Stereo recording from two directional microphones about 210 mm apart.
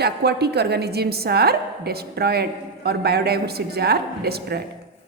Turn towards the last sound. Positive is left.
turn(degrees=-50)  # may be behind; listen again after turning